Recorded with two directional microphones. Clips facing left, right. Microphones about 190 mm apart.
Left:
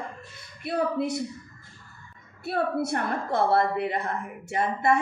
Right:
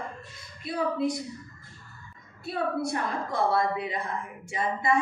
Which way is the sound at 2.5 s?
65° left (ahead or behind).